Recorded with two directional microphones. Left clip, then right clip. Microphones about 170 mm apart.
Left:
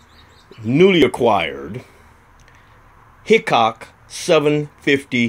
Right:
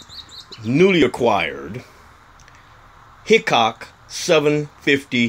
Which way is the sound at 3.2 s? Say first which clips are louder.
Left 1 dB; 10° left (ahead or behind).